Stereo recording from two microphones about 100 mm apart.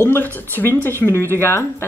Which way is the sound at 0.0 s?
25° left (ahead or behind).